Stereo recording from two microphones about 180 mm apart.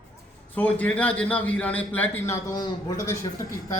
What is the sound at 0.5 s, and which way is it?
A man's voice, 10° left (ahead or behind).